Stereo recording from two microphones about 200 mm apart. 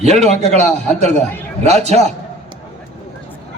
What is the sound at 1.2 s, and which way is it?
Speech, 35° right (ahead or behind).